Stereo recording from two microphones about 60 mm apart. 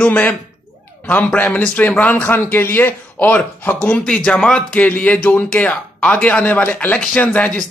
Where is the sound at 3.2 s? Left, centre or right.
Left.